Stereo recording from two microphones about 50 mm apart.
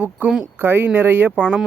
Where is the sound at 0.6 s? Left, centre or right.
Right.